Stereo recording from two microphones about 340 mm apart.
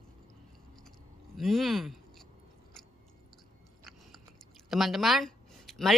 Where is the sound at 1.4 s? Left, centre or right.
Centre.